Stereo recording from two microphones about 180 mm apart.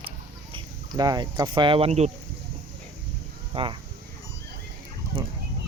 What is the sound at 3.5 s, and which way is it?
Speech, 25° right (ahead or behind).